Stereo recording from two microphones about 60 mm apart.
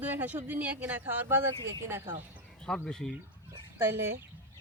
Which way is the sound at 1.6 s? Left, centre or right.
Right.